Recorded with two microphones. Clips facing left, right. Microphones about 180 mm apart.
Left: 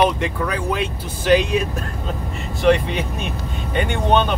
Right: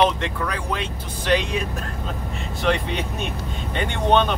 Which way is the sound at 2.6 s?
5° left (ahead or behind).